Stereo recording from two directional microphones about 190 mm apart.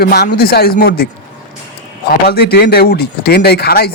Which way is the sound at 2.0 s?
55° left (ahead or behind).